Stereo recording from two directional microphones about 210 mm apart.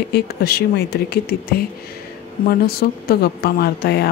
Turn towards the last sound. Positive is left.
turn(degrees=50)  # may be behind; listen again after turning